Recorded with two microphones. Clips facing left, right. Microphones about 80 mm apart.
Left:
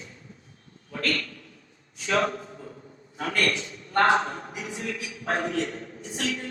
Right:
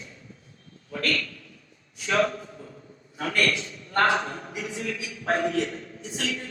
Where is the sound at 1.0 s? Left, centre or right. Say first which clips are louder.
Right 1 dB; left.